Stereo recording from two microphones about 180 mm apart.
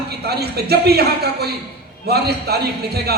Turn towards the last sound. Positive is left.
turn(degrees=-65)  # may be behind; listen again after turning